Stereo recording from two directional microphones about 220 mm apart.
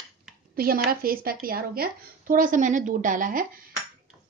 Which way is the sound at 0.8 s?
40° right (ahead or behind).